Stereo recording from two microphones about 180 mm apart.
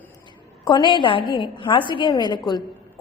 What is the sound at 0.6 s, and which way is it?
A woman's voice, 25° left (ahead or behind).